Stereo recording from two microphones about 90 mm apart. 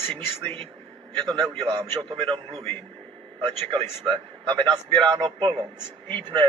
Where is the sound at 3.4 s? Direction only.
80° right.